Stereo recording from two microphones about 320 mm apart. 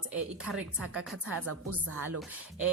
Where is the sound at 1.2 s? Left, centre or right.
Right.